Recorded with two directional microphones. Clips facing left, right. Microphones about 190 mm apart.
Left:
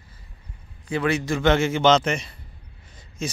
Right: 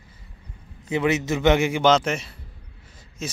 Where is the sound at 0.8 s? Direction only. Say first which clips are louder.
Right 1 dB; 20° right (ahead or behind).